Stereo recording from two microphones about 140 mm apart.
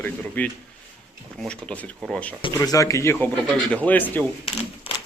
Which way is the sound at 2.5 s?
25° left (ahead or behind).